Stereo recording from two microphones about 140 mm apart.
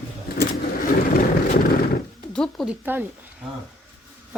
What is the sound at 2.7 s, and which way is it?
Speech, 15° right (ahead or behind).